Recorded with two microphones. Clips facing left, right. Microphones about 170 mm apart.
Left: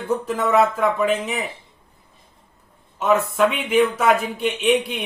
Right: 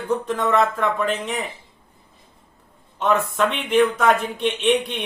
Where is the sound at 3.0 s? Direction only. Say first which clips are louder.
Left 2 dB; 5° left (ahead or behind).